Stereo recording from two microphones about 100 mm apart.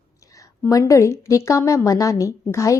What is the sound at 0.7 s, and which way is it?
A woman's voice, 35° left (ahead or behind).